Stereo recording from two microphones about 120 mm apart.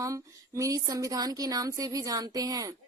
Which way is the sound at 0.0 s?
25° right (ahead or behind).